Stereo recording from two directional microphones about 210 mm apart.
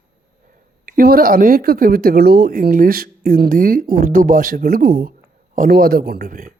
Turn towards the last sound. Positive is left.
turn(degrees=-45)  # may be behind; listen again after turning